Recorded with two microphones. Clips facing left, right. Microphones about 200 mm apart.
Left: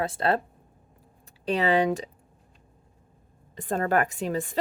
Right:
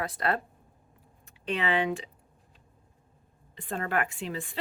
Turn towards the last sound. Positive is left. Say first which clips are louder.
# left 7 dB
turn(degrees=45)  # may be behind; listen again after turning